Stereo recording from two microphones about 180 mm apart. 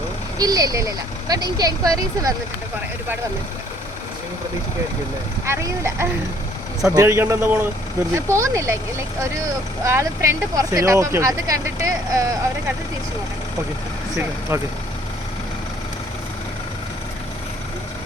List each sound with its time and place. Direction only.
0.3 s speech: 20° right (ahead or behind)
5.5 s speech: 15° right (ahead or behind)
9.8 s speech: 15° right (ahead or behind)
14.5 s speech: 15° right (ahead or behind)